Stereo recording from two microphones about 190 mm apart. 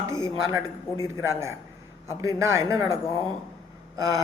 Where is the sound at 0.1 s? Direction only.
15° right (ahead or behind).